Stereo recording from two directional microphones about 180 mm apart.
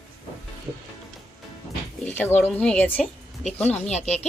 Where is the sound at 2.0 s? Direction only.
10° left (ahead or behind).